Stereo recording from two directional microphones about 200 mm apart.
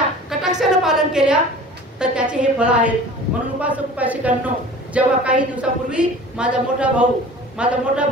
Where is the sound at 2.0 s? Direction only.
5° right (ahead or behind).